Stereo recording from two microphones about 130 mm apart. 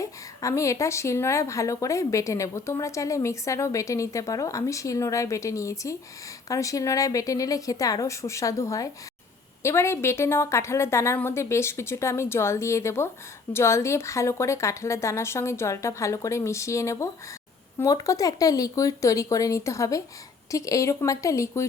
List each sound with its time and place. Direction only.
0.0 s speech: 25° left (ahead or behind)